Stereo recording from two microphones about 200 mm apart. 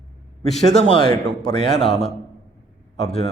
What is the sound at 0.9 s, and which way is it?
Speech, 20° left (ahead or behind).